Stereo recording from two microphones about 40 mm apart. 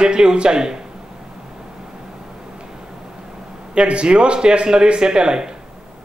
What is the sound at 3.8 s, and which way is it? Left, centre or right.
Speech, right.